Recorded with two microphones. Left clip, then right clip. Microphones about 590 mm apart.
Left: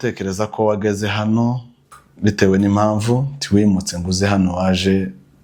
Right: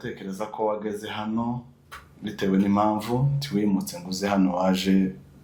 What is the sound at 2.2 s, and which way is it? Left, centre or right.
Speech, left.